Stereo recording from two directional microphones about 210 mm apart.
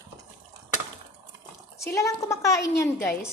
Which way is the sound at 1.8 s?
15° left (ahead or behind).